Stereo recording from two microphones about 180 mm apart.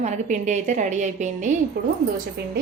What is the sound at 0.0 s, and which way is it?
A woman's voice, 40° right (ahead or behind).